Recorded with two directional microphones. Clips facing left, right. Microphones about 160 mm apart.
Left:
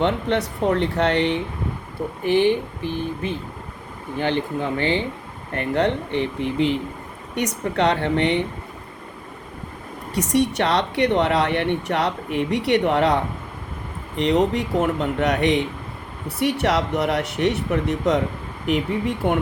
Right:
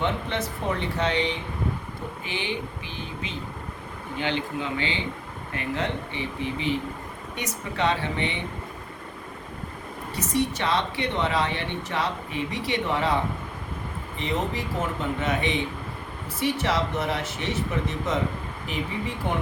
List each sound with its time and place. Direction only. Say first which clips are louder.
0.0 s speech: left 6 dB; 65° left (ahead or behind)
2.2 s speech: left 14 dB; 50° left (ahead or behind)
5.5 s speech: left 8 dB; 60° left (ahead or behind)
10.2 s speech: left 6 dB; 70° left (ahead or behind)
14.2 s speech: left 9 dB; 70° left (ahead or behind)